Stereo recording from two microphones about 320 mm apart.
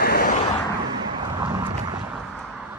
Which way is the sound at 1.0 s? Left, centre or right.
Centre.